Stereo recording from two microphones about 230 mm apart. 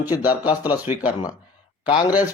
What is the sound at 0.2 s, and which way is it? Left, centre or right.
Speech, centre.